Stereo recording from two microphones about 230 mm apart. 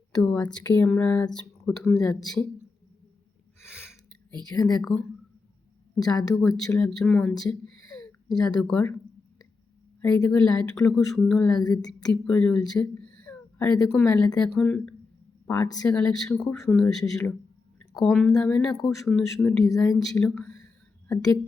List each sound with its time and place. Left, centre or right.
0.2 s a sound: centre
0.5 s speech: centre
2.0 s speech: centre
4.8 s speech: centre
6.1 s speech: centre
8.3 s speech: centre
8.6 s speech: centre
10.0 s speech: centre
11.4 s speech: centre
12.0 s speech: centre
15.4 s speech: centre
15.9 s speech: centre
19.6 s speech: centre
20.0 s speech: centre